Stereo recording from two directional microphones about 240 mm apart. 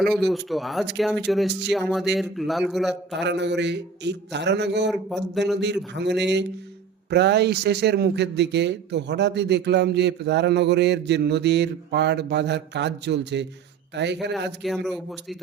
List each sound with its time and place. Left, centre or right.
0.0 s a man's voice: centre
3.2 s speech: right
4.9 s a man's voice: centre
5.5 s speech: right
14.6 s a man's voice: centre